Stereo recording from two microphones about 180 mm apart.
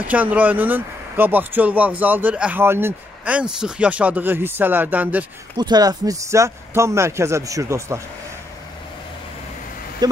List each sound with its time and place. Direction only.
0.0 s speech: 10° right (ahead or behind)
5.6 s speech: 20° right (ahead or behind)